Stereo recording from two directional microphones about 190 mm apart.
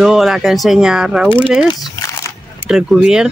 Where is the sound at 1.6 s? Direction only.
20° left (ahead or behind).